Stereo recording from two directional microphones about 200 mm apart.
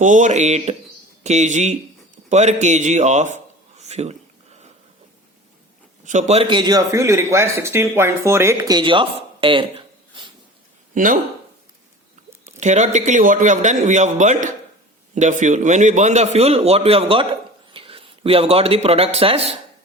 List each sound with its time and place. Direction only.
0.0 s a man's voice: 40° right (ahead or behind)
6.1 s a man's voice: 35° right (ahead or behind)
10.9 s a man's voice: 40° right (ahead or behind)
12.5 s a man's voice: 35° right (ahead or behind)